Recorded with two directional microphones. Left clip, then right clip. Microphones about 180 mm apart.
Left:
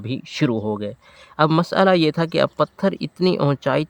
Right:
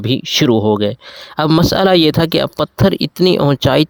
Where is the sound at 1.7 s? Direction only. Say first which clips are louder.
Right 5 dB; 40° right (ahead or behind).